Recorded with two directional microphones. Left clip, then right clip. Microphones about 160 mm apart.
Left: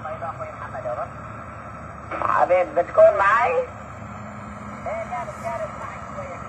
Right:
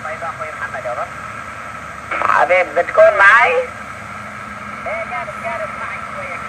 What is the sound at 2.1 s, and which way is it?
Speech, 20° right (ahead or behind).